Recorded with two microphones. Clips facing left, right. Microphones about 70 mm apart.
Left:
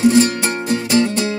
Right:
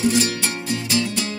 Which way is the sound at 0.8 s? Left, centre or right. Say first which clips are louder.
Left 8 dB; left.